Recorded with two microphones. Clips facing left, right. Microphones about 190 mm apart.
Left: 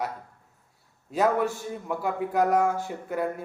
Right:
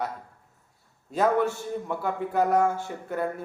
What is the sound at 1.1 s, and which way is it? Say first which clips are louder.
A man's voice: right 1 dB; 5° left (ahead or behind).